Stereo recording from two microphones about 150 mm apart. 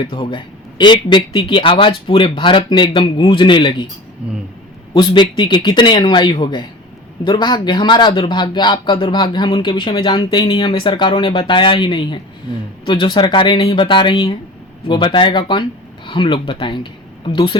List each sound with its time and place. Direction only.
0.0 s speech: 35° left (ahead or behind)
4.9 s speech: 30° left (ahead or behind)